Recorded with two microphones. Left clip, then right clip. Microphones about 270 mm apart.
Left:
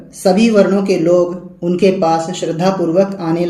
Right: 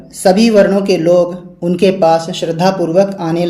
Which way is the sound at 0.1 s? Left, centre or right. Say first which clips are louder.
Right 3 dB; right.